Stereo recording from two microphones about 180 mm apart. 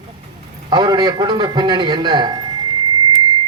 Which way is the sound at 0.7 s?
25° right (ahead or behind).